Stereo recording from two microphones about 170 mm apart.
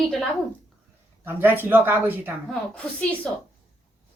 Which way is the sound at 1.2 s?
10° right (ahead or behind).